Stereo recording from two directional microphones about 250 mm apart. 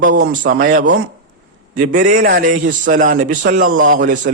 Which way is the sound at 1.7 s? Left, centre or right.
Right.